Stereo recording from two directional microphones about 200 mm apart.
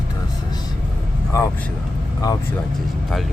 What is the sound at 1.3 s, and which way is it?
Speech, 15° left (ahead or behind).